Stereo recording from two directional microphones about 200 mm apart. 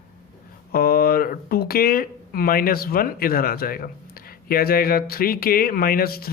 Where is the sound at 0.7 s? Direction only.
50° left (ahead or behind).